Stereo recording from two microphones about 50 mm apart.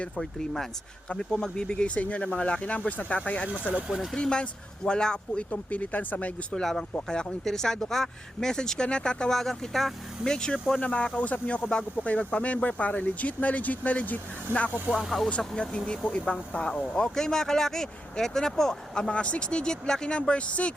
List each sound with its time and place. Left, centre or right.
0.2 s speech: centre
1.1 s speech: centre
3.8 s speech: centre
4.1 s speech: centre
5.5 s speech: left
6.5 s speech: centre
10.2 s speech: centre
10.8 s speech: left
15.4 s speech: centre